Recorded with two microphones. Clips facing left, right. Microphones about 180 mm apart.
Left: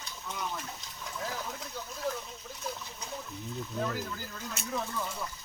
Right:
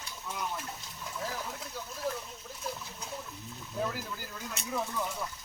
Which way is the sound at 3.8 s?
10° right (ahead or behind).